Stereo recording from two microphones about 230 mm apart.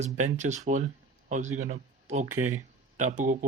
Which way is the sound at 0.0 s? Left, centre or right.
Right.